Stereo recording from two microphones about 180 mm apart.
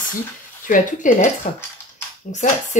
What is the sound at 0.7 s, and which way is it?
Speech, 45° left (ahead or behind).